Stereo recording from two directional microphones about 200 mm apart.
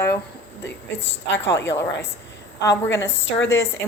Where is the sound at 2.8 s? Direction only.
15° left (ahead or behind).